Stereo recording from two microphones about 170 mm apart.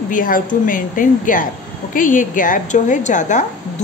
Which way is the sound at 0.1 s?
50° left (ahead or behind).